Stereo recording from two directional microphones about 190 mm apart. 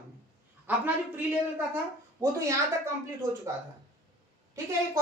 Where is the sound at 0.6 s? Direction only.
10° right (ahead or behind).